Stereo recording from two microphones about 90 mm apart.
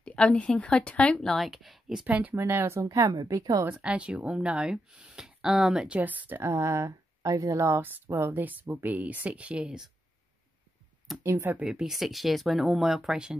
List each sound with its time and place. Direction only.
0.0 s speech: 15° left (ahead or behind); by 2.0 s 5° right (ahead or behind)
2.0 s speech: 20° right (ahead or behind)
2.3 s a woman's voice: 30° right (ahead or behind)
3.8 s speech: 15° right (ahead or behind)
5.9 s a woman's voice: 20° right (ahead or behind)
11.2 s a woman's voice: 25° right (ahead or behind)
11.6 s speech: 5° right (ahead or behind)